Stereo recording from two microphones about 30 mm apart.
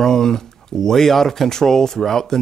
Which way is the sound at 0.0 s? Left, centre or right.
Centre.